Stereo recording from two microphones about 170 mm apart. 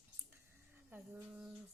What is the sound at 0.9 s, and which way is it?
Speech, 10° right (ahead or behind).